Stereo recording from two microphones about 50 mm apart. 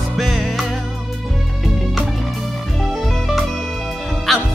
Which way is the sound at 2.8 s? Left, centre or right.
Centre.